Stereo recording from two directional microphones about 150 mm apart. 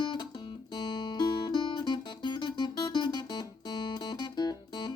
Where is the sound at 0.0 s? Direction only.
30° left (ahead or behind).